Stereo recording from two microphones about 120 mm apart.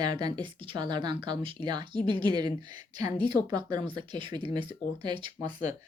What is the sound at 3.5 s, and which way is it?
Speech, 35° right (ahead or behind).